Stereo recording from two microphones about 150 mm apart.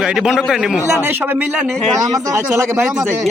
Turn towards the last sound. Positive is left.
turn(degrees=-15)  # may be behind; listen again after turning